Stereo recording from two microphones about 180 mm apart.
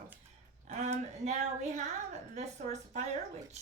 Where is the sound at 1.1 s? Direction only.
40° right (ahead or behind).